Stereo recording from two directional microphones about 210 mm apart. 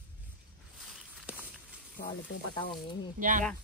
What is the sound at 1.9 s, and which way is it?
Speech, 45° left (ahead or behind).